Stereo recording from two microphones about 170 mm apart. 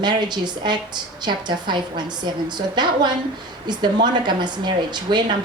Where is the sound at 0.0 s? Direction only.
25° right (ahead or behind).